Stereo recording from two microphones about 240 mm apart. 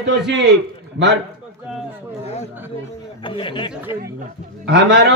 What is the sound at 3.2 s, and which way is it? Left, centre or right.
Speech, left.